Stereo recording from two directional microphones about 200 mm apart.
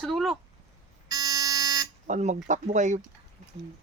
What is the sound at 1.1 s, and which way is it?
Alarm, 20° right (ahead or behind).